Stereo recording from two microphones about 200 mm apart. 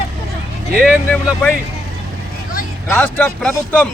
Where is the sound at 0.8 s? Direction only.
5° left (ahead or behind).